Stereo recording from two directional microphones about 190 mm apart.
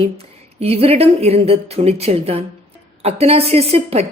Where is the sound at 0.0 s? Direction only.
30° right (ahead or behind).